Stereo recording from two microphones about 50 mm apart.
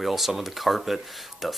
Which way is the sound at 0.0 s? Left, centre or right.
Centre.